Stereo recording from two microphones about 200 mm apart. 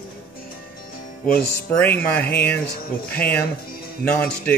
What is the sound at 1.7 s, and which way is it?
Speech, 10° left (ahead or behind).